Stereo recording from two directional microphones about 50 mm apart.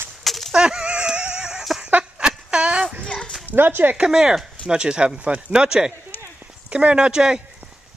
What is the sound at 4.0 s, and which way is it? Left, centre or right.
Speech, centre.